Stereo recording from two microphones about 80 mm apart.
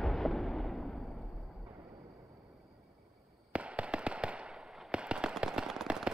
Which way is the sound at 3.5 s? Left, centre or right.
Centre.